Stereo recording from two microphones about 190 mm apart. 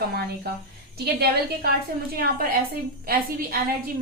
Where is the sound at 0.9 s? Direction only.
55° right (ahead or behind).